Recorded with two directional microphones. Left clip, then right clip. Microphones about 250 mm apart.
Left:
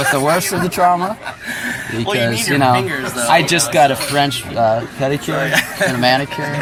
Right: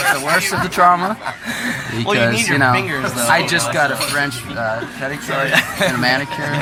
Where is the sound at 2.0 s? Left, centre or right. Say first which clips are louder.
Right 2 dB; right.